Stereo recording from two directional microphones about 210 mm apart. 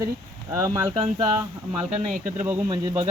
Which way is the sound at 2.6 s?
20° right (ahead or behind).